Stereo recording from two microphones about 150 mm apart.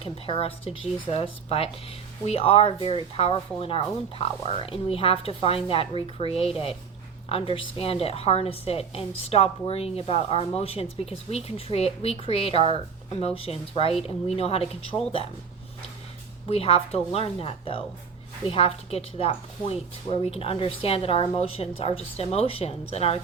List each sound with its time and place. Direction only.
0.0 s a woman's voice: 40° left (ahead or behind)
16.5 s a woman's voice: 40° left (ahead or behind)